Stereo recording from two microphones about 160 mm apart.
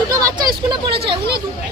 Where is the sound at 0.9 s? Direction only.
90° right.